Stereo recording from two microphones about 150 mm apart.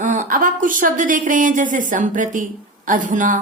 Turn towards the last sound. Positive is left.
turn(degrees=-60)  # may be behind; listen again after turning